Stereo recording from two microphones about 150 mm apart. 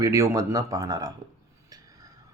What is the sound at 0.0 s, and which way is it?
Speech, 20° right (ahead or behind).